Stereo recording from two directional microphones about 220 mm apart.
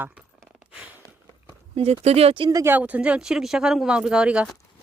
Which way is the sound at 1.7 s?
25° right (ahead or behind).